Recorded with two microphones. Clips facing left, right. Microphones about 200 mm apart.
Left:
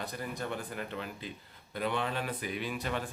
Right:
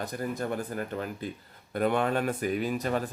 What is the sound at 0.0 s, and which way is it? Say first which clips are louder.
Speech: right 6 dB; 45° right (ahead or behind).